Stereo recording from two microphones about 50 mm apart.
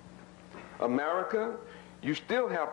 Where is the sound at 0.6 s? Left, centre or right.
Centre.